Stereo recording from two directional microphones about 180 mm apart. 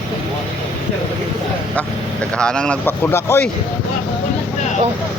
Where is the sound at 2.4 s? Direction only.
5° left (ahead or behind).